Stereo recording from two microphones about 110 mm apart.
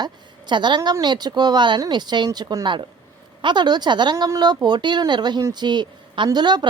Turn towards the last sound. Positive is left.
turn(degrees=-40)  # may be behind; listen again after turning